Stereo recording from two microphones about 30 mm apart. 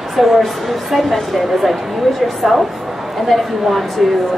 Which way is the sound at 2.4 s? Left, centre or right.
Centre.